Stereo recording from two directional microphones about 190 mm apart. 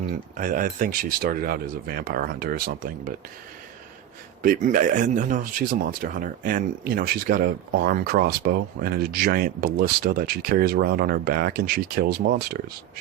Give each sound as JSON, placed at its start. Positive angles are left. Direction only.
{"t": 0.1, "sound": "speech", "side_deg": -45}
{"t": 4.4, "sound": "speech", "side_deg": -45}